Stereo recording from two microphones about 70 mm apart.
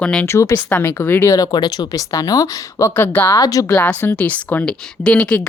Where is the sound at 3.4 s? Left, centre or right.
Left.